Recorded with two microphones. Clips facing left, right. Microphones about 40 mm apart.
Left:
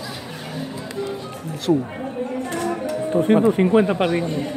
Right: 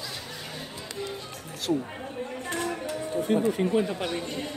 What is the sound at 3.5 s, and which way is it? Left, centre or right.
Speech, left.